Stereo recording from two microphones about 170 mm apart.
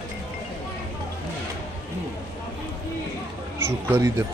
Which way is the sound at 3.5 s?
15° right (ahead or behind).